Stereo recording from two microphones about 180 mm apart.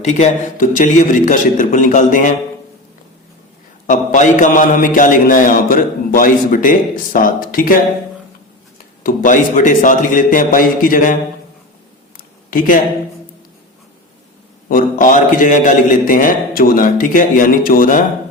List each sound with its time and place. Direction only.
0.0 s a man's voice: 40° left (ahead or behind)
3.8 s a man's voice: 45° left (ahead or behind)
9.0 s a man's voice: 45° left (ahead or behind)
12.1 s a sound: 50° left (ahead or behind)
14.7 s a man's voice: 50° left (ahead or behind)